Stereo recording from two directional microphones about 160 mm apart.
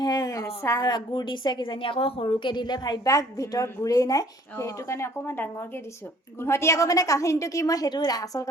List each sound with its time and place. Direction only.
0.0 s a woman's voice: 25° left (ahead or behind)